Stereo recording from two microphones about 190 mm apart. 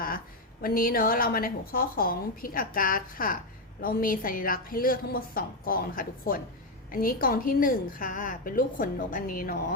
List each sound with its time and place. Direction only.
0.6 s a woman's voice: 50° left (ahead or behind)